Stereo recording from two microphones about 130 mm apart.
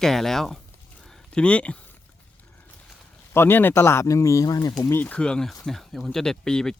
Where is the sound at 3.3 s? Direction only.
15° left (ahead or behind).